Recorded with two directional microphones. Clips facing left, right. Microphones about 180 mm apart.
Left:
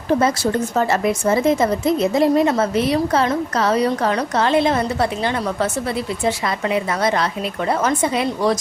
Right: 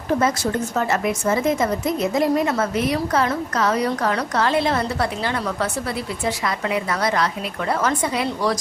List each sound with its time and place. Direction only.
0.8 s a woman's voice: 30° left (ahead or behind)